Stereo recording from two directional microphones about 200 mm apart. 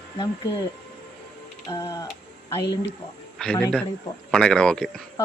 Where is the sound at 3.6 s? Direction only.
5° left (ahead or behind).